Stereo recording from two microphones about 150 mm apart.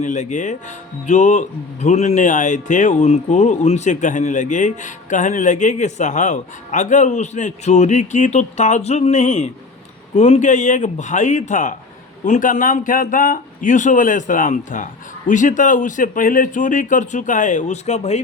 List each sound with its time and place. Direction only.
0.0 s speech: 55° left (ahead or behind)